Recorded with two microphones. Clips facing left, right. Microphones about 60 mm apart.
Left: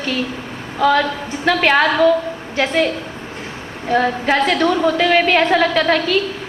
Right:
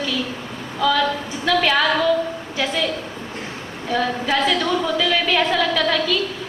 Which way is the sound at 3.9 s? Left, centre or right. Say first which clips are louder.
Left 5 dB; left.